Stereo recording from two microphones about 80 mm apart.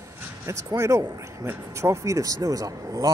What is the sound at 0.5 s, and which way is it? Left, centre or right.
Speech, right.